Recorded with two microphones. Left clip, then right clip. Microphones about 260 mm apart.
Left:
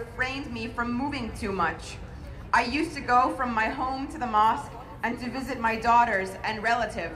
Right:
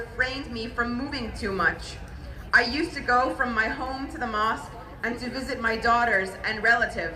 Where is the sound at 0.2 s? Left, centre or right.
Centre.